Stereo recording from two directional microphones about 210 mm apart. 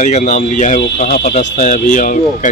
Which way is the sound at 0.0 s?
40° left (ahead or behind).